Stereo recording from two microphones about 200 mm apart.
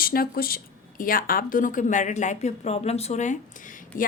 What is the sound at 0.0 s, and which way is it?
Speech, 45° left (ahead or behind).